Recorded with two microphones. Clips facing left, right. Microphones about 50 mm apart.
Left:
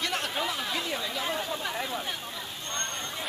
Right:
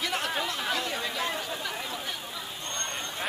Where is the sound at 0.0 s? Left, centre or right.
Centre.